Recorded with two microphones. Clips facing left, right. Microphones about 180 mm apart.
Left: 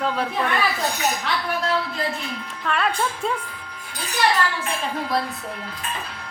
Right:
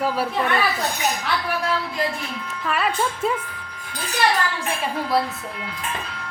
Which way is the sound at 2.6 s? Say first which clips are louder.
Even; 5° right (ahead or behind).